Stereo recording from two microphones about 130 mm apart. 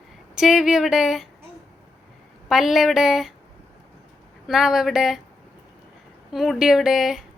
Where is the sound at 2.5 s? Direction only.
Centre (ahead or behind).